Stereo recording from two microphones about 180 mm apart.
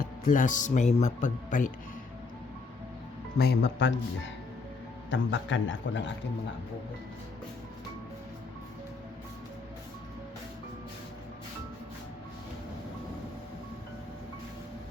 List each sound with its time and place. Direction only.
0.0 s speech: 45° left (ahead or behind)
3.3 s speech: 60° left (ahead or behind); by 3.9 s 80° left
5.1 s a man's voice: 90° left